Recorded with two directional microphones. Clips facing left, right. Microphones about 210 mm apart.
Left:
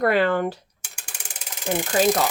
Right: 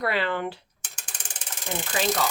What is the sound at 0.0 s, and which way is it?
Speech, 50° left (ahead or behind).